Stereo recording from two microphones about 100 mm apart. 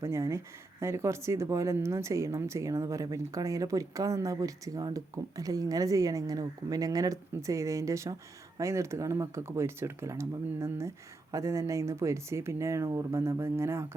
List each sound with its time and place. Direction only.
0.0 s speech: 30° right (ahead or behind)